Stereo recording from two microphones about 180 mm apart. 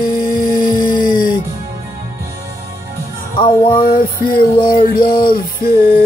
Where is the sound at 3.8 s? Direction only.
50° left (ahead or behind).